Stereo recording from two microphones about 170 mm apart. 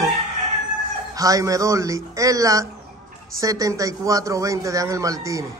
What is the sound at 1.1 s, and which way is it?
A man's voice, 20° right (ahead or behind).